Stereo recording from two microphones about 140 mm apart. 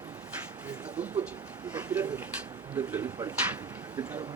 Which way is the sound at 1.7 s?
10° right (ahead or behind).